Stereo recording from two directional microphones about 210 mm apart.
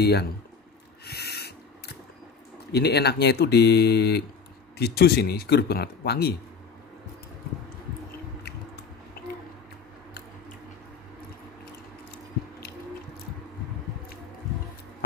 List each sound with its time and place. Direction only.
0.0 s speech: 50° left (ahead or behind)
1.0 s owl: 50° left (ahead or behind)
2.7 s speech: 50° left (ahead or behind)